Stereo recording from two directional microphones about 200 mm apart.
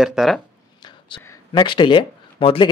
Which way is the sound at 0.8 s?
25° left (ahead or behind).